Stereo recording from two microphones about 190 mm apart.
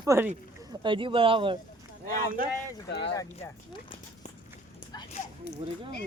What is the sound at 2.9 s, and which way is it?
Speech, 70° left (ahead or behind).